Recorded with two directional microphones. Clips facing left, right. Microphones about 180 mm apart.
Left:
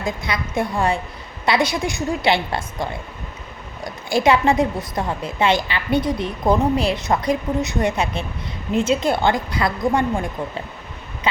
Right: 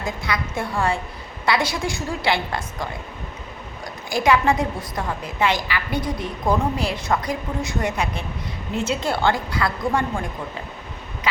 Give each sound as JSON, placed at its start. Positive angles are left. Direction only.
{"t": 0.0, "sound": "a woman's voice", "side_deg": 20}
{"t": 4.1, "sound": "a woman's voice", "side_deg": 25}